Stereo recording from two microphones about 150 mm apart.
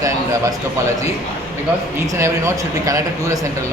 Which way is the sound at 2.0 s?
20° right (ahead or behind).